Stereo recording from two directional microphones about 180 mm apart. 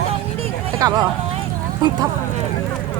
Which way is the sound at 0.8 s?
20° right (ahead or behind).